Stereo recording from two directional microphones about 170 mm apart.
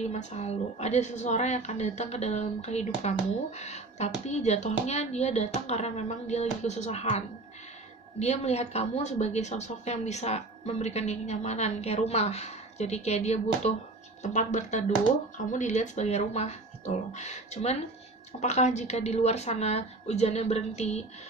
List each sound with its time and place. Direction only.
0.0 s a woman's voice: 40° left (ahead or behind)